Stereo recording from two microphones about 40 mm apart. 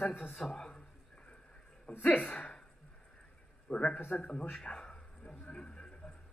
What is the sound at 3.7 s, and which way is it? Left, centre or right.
Speech, left.